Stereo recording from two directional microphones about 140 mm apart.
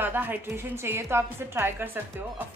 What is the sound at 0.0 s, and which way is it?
A woman's voice, 15° right (ahead or behind).